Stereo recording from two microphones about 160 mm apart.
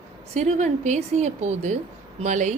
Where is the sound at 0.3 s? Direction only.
45° right (ahead or behind).